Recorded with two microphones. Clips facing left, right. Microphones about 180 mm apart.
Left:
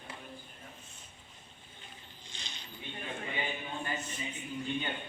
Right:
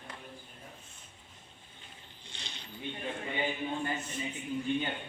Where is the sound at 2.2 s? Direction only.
65° right (ahead or behind).